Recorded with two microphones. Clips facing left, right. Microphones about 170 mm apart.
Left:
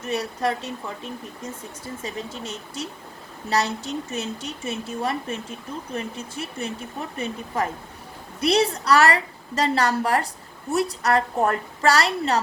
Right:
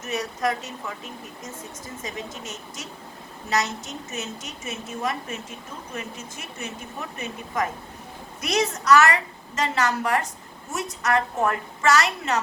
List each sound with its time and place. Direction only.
0.0 s a woman's voice: 30° left (ahead or behind)